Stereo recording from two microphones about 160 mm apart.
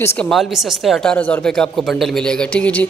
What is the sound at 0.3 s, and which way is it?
A woman's voice, centre (ahead or behind).